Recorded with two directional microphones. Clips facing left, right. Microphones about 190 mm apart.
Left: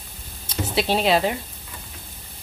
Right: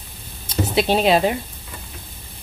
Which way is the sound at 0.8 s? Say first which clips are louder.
Right 3 dB; 15° right (ahead or behind).